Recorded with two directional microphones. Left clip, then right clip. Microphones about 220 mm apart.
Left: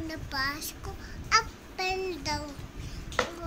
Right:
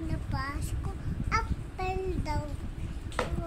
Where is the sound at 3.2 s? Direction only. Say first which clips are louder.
Left 3 dB; centre (ahead or behind).